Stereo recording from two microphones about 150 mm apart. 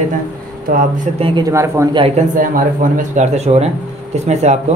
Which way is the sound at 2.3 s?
65° right (ahead or behind).